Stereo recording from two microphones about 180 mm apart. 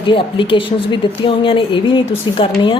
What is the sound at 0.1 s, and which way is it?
A woman's voice, 30° left (ahead or behind).